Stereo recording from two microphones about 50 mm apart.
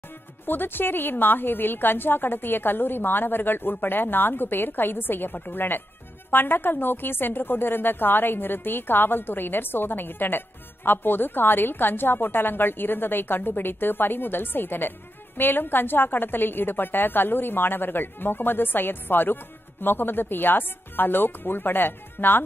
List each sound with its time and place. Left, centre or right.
0.5 s a woman's voice: left